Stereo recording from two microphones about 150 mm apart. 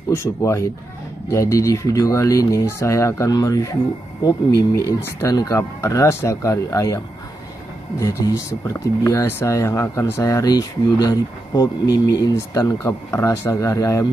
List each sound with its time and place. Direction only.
0.1 s speech: 15° left (ahead or behind)
8.0 s speech: 20° left (ahead or behind)